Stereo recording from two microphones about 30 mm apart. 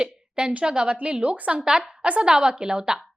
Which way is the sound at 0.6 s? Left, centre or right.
Right.